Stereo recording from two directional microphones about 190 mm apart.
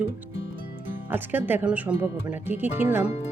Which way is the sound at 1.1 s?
10° right (ahead or behind).